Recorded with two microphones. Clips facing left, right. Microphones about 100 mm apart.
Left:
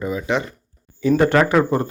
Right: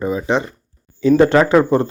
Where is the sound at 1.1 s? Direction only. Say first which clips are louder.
Right 4 dB; 20° right (ahead or behind).